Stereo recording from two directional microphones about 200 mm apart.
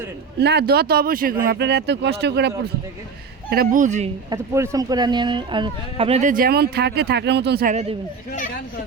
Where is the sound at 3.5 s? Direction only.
45° right (ahead or behind).